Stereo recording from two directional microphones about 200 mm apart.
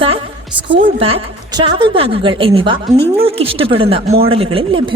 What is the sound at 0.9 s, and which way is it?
A woman's voice, 30° right (ahead or behind).